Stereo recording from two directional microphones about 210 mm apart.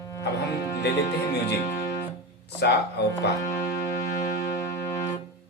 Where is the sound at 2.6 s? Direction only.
50° left (ahead or behind).